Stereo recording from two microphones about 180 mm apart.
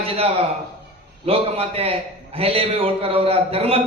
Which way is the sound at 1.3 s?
35° right (ahead or behind).